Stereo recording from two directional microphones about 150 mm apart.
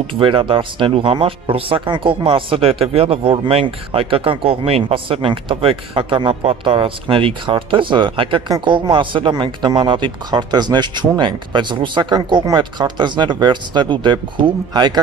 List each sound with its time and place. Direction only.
0.0 s speech: 35° right (ahead or behind)